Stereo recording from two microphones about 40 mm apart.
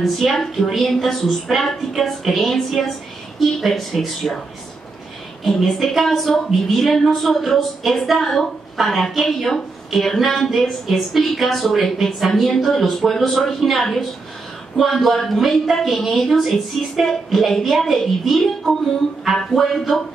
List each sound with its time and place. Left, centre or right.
0.0 s a woman's voice: centre
5.6 s a woman's voice: centre